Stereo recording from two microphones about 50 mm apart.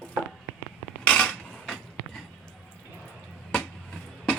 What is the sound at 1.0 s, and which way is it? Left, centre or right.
Cutlery, left.